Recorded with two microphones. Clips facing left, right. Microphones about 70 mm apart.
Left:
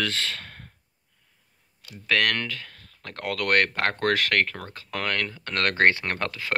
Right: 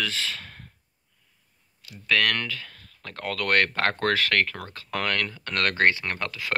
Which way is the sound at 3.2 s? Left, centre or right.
Left.